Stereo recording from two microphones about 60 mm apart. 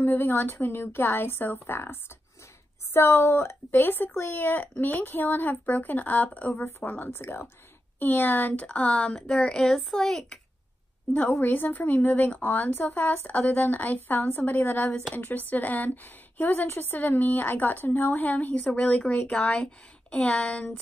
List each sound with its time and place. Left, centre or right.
0.0 s a woman's voice: left; by 10.4 s centre
11.2 s a woman's voice: left; by 20.8 s centre